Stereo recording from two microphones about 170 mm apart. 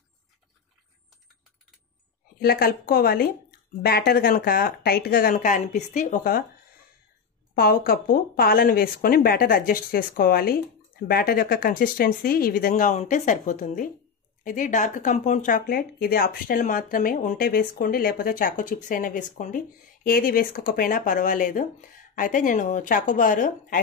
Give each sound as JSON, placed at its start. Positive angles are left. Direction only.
{"t": 2.2, "sound": "speech", "side_deg": 65}
{"t": 7.5, "sound": "speech", "side_deg": 60}